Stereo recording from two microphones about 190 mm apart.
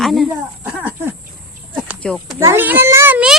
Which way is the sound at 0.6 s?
10° right (ahead or behind).